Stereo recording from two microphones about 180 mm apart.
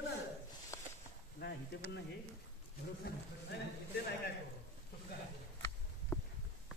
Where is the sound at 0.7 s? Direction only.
15° left (ahead or behind).